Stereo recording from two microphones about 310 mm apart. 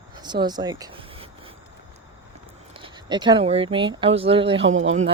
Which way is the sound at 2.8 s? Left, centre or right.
Centre.